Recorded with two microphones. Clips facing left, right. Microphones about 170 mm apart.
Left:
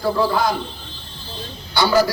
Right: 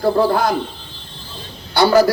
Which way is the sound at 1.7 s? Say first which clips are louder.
Right 4 dB; 55° right (ahead or behind).